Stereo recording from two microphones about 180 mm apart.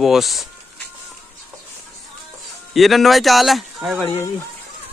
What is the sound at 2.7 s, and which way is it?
A man's voice, centre (ahead or behind).